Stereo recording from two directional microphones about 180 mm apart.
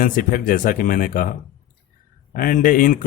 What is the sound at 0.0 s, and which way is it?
Speech, 50° left (ahead or behind).